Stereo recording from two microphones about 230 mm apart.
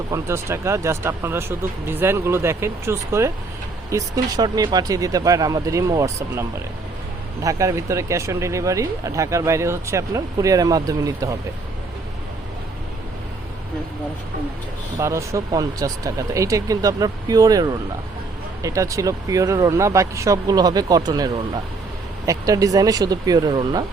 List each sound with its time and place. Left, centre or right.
0.1 s speech: centre
7.4 s speech: centre
14.9 s speech: centre
22.3 s speech: centre